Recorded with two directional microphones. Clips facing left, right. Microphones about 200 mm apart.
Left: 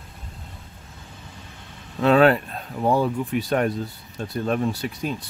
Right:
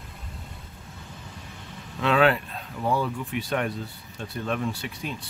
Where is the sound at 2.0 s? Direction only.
40° left (ahead or behind).